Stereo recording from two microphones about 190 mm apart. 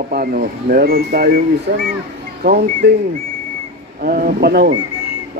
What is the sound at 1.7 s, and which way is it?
Speech, 75° right (ahead or behind).